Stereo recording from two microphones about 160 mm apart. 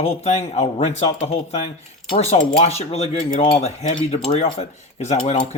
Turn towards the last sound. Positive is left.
turn(degrees=45)  # may be behind; listen again after turning